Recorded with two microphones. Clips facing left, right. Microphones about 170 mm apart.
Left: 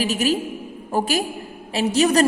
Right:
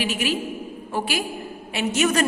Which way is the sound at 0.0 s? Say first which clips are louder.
Left 4 dB; 40° left (ahead or behind).